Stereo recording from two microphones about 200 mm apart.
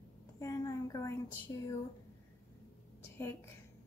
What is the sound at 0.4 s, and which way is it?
Speech, 15° left (ahead or behind).